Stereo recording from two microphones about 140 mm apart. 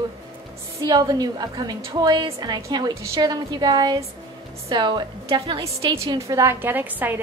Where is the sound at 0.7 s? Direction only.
25° right (ahead or behind).